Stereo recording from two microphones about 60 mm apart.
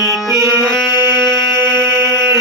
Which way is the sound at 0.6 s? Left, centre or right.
Centre.